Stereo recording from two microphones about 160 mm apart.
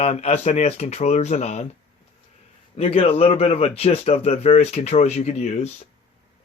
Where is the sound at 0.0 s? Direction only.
40° left (ahead or behind).